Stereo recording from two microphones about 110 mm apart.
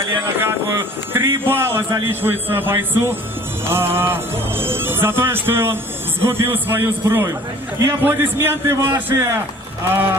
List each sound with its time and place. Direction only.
0.3 s a man's voice: 20° right (ahead or behind)